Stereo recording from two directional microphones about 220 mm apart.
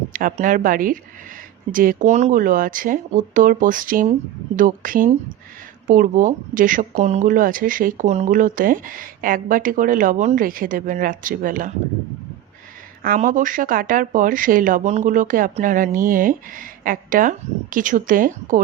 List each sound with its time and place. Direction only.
0.1 s speech: 40° right (ahead or behind)
13.0 s speech: 40° right (ahead or behind)